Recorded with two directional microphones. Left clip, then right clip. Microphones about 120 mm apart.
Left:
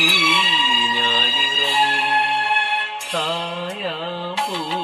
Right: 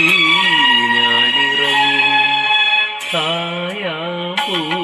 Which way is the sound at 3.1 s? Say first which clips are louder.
Right 3 dB; 20° right (ahead or behind).